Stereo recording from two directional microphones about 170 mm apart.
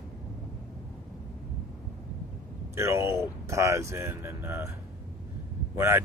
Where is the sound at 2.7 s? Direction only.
15° right (ahead or behind).